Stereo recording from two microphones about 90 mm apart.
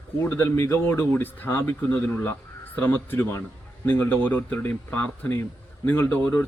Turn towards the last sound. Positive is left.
turn(degrees=15)  # may be behind; listen again after turning